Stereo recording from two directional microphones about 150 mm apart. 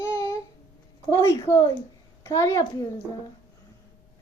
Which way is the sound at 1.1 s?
20° left (ahead or behind).